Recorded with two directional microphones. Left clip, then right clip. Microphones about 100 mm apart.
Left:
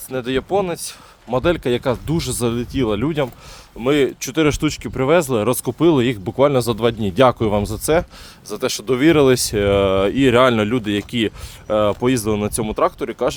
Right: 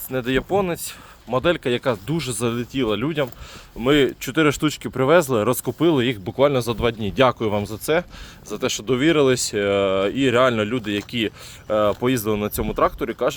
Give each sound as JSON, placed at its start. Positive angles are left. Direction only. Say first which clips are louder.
{"t": 0.1, "sound": "speech", "louder": "left 1 dB", "side_deg": 20}
{"t": 3.8, "sound": "speech", "louder": "left 1 dB", "side_deg": 25}
{"t": 4.6, "sound": "speech", "louder": "left 1 dB", "side_deg": 0}
{"t": 5.4, "sound": "speech", "louder": "left 2 dB", "side_deg": 20}
{"t": 5.8, "sound": "speech", "louder": "left 4 dB", "side_deg": 45}
{"t": 11.7, "sound": "speech", "louder": "left 2 dB", "side_deg": 30}